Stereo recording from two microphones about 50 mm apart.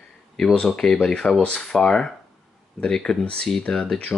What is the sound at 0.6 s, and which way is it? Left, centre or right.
Speech, centre.